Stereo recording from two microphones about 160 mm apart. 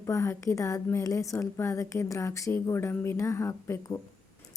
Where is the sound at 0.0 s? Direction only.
15° left (ahead or behind).